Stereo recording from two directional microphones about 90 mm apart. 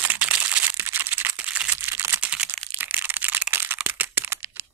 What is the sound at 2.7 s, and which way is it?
Crushing, 20° right (ahead or behind).